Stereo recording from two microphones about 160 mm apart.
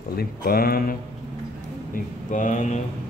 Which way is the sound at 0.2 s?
70° left (ahead or behind).